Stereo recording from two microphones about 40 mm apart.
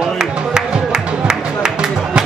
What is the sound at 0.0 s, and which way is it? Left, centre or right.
Music, right.